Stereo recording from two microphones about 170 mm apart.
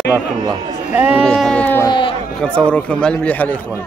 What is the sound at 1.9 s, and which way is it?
Speech, 30° left (ahead or behind).